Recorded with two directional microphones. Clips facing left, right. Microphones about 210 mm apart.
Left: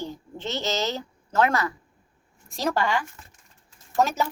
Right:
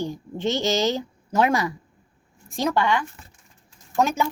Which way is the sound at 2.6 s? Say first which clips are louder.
Right 3 dB; 5° left (ahead or behind).